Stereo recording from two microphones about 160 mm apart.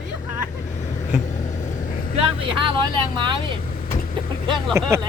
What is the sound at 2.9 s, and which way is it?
Speech, 30° right (ahead or behind).